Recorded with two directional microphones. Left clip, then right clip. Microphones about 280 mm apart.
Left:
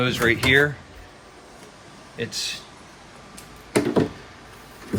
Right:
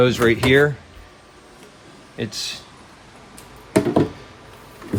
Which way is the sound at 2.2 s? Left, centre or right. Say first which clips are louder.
Even; right.